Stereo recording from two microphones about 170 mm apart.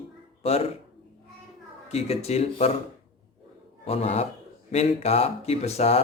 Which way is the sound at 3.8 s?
40° left (ahead or behind).